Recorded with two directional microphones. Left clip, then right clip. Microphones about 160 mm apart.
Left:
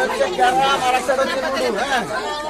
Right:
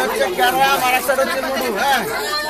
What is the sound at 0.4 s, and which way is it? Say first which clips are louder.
Speech: right 1 dB; 10° left (ahead or behind).